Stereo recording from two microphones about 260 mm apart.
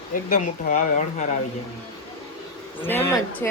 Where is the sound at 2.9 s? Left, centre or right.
Centre.